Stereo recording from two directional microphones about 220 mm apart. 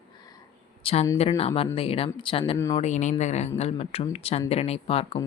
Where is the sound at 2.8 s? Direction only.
30° left (ahead or behind).